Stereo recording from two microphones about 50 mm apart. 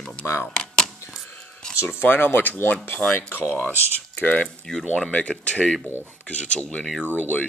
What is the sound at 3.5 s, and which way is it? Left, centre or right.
Speech, left.